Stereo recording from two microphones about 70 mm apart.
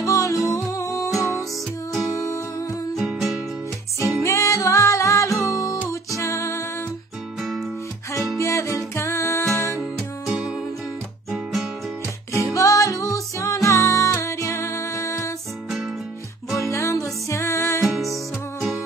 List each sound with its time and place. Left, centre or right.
0.0 s music: left
2.1 s music: left
2.9 s music: centre
4.0 s music: left
8.4 s music: left
10.2 s music: centre
12.5 s music: left
16.5 s music: left
17.9 s music: centre